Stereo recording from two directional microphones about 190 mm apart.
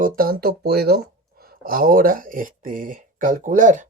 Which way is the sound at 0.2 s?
50° right (ahead or behind).